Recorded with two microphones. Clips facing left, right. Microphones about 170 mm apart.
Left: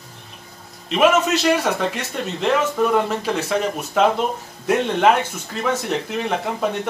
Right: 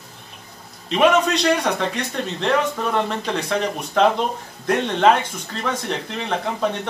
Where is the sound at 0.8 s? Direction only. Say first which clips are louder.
Even; 5° left (ahead or behind).